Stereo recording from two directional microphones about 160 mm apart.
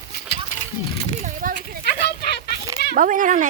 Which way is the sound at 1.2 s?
50° right (ahead or behind).